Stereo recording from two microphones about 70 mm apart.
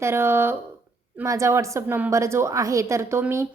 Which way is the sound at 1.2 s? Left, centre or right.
Right.